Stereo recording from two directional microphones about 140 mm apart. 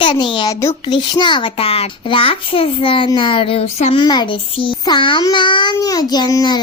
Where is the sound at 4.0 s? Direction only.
35° left (ahead or behind).